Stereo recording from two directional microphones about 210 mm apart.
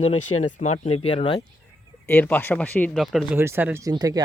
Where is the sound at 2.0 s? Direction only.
10° left (ahead or behind).